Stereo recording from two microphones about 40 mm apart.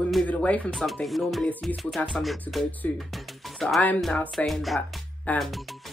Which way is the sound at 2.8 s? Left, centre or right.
Left.